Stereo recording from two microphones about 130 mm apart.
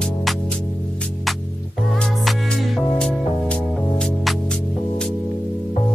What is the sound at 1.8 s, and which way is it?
Music, centre (ahead or behind).